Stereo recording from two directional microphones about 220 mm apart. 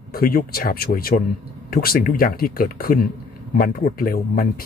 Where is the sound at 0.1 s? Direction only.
40° left (ahead or behind).